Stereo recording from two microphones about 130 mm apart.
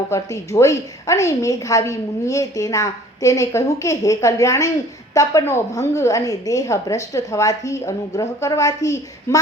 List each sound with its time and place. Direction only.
0.1 s a woman's voice: 25° left (ahead or behind)